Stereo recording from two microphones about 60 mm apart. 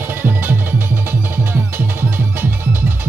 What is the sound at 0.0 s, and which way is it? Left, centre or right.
Music, right.